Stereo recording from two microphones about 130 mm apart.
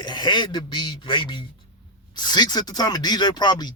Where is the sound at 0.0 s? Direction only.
35° left (ahead or behind).